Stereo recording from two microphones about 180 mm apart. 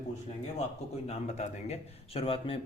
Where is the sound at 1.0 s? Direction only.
35° left (ahead or behind).